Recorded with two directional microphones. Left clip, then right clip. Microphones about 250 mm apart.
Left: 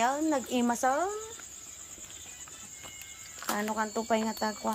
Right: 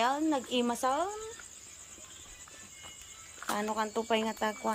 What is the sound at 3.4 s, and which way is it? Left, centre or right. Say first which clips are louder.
Cricket: left 1 dB; left.